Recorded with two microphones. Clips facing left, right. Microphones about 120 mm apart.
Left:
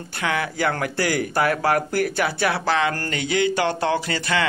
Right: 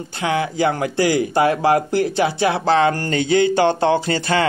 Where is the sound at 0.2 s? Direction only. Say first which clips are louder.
Right 4 dB; 20° right (ahead or behind).